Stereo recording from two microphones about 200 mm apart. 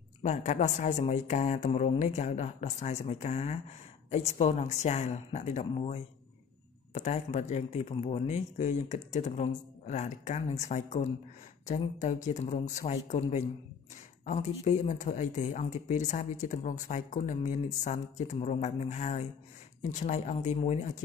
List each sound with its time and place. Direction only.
0.2 s speech: 35° left (ahead or behind)